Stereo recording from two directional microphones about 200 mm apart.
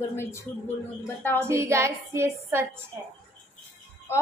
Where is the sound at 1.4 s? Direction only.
15° right (ahead or behind).